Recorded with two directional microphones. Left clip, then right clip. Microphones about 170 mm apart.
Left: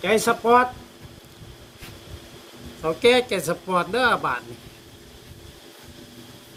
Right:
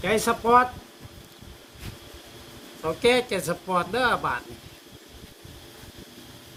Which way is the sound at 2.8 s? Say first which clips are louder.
Left 4 dB; centre (ahead or behind).